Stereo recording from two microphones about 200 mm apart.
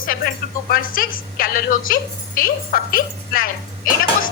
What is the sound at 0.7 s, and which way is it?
A woman's voice, 45° left (ahead or behind).